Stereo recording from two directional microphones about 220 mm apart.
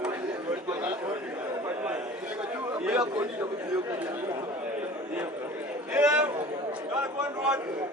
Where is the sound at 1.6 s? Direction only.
5° right (ahead or behind).